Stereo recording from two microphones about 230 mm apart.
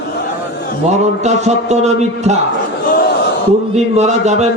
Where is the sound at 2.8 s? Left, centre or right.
Left.